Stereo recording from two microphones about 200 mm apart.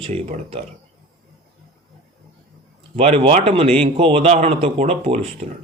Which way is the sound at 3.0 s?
30° right (ahead or behind).